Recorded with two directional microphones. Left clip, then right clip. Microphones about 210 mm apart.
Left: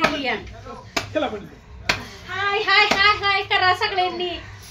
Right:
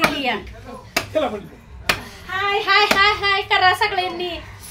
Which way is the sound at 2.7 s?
30° right (ahead or behind).